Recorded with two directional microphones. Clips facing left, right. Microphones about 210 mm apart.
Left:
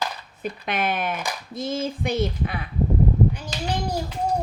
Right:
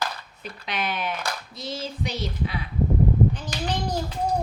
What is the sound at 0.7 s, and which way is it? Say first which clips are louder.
Speech: left 3 dB; 50° left (ahead or behind).